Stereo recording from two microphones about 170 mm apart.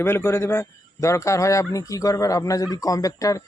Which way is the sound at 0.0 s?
15° left (ahead or behind).